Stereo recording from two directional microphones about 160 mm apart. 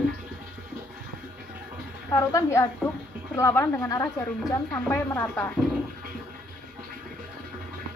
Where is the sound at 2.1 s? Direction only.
20° left (ahead or behind).